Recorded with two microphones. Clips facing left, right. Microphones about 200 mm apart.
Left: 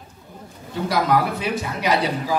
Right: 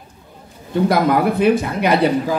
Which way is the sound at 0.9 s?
55° right (ahead or behind).